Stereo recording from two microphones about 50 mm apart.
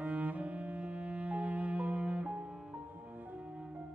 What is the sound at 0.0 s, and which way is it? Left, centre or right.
Cello, right.